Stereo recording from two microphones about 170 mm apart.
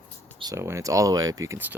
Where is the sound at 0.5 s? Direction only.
15° right (ahead or behind).